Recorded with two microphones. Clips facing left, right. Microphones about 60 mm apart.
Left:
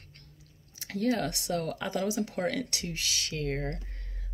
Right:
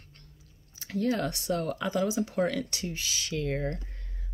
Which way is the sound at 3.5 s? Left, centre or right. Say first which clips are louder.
Right 2 dB; centre.